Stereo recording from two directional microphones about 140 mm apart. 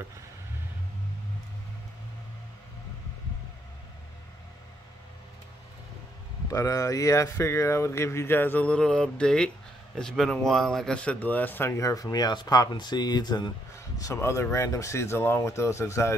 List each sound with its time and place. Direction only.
6.5 s speech: 25° left (ahead or behind)